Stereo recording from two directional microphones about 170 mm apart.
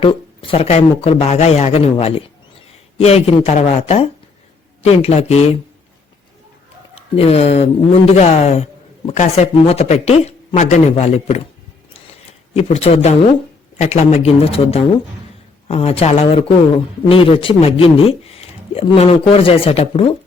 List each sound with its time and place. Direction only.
0.0 s speech: 35° left (ahead or behind)
6.9 s speech: 35° left (ahead or behind)
12.5 s speech: 40° left (ahead or behind)